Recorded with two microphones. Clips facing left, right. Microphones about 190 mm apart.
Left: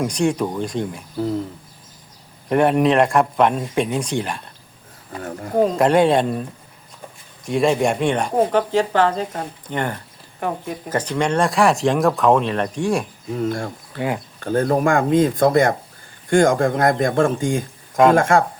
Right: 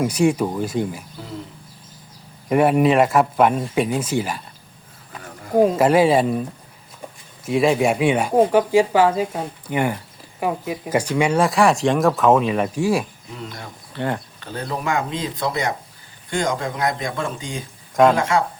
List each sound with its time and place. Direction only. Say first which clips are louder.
0.0 s speech: right 2 dB; 5° right (ahead or behind)
2.5 s speech: even; 5° right (ahead or behind)
5.5 s speech: right 1 dB; 5° right (ahead or behind)
7.4 s speech: even; centre (ahead or behind)
13.3 s speech: left 12 dB; 50° left (ahead or behind)